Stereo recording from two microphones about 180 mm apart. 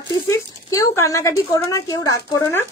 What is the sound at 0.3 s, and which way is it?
Speech, 15° left (ahead or behind).